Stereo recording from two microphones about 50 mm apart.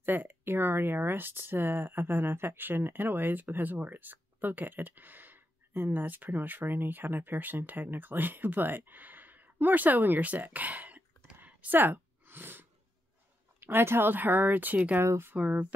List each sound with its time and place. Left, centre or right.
0.0 s speech: right
11.4 s a sound: right
13.6 s speech: right
15.3 s music: right